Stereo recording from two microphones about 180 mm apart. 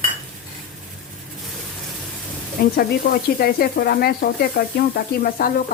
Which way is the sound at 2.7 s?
55° left (ahead or behind).